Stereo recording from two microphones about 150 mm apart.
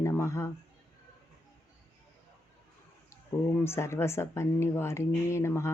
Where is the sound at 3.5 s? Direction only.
15° left (ahead or behind).